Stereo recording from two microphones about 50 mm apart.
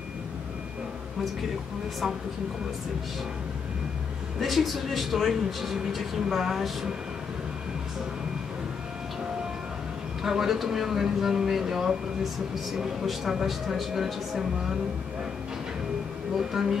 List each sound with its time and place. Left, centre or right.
4.4 s speech: centre
10.2 s speech: centre
16.3 s speech: centre